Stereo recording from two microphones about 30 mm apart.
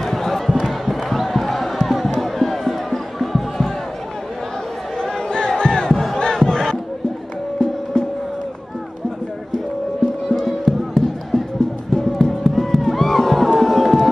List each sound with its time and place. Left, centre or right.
0.0 s crowd: centre
0.7 s a sound: centre
1.3 s basketball bounce: centre
1.9 s music: centre
4.9 s crowd: left
5.9 s battle cry: centre
6.1 s battle cry: left
7.5 s music: left
10.3 s music: centre
11.0 s music: left; by 14.0 s centre